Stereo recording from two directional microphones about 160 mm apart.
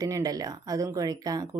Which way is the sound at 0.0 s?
20° right (ahead or behind).